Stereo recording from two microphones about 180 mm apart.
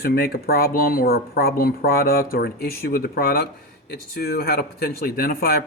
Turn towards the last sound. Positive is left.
turn(degrees=55)  # may be behind; listen again after turning